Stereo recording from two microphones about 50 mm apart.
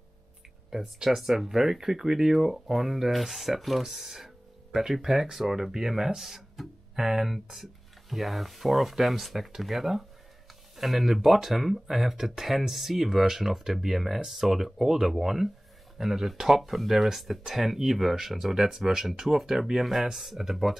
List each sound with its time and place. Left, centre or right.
0.7 s speech: centre